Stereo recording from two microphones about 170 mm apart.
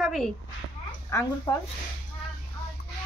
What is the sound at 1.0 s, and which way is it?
Speech, 15° left (ahead or behind).